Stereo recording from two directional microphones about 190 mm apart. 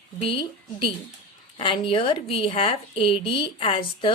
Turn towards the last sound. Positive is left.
turn(degrees=25)  # may be behind; listen again after turning